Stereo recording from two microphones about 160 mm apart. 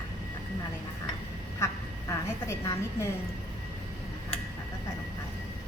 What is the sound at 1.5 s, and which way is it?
Quack, 20° left (ahead or behind).